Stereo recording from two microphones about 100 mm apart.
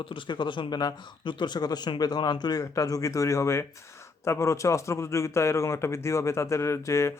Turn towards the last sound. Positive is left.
turn(degrees=30)  # may be behind; listen again after turning